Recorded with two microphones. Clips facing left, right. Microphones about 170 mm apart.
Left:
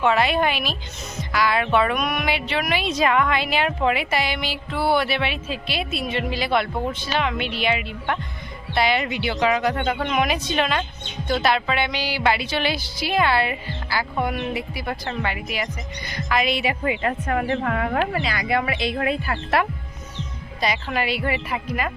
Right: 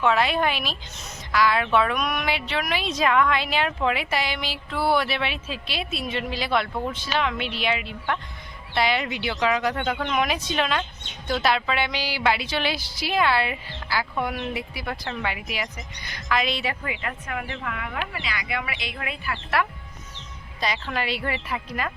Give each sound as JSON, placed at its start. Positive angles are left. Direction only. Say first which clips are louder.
{"t": 0.0, "sound": "speech", "louder": "left 2 dB", "side_deg": 0}
{"t": 16.8, "sound": "speech", "louder": "left 9 dB", "side_deg": 25}
{"t": 17.1, "sound": "a woman's voice", "louder": "left 9 dB", "side_deg": 40}
{"t": 20.6, "sound": "speech", "louder": "left 3 dB", "side_deg": 5}